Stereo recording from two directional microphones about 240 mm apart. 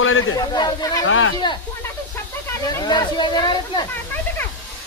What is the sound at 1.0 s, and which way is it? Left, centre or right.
Speech, left.